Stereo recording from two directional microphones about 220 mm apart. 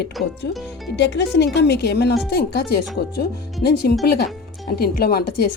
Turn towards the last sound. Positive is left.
turn(degrees=45)  # may be behind; listen again after turning